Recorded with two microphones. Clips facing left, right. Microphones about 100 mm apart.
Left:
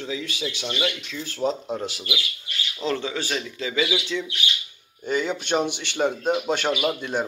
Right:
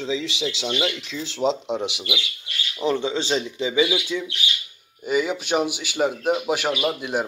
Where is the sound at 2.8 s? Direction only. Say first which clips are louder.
Right 4 dB; 20° right (ahead or behind).